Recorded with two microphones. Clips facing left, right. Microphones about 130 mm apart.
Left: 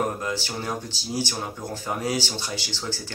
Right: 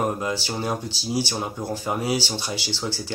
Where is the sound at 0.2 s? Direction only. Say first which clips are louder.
Right 3 dB; 15° right (ahead or behind).